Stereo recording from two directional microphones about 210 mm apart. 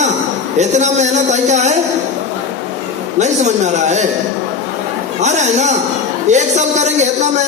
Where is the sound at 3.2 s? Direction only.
35° right (ahead or behind).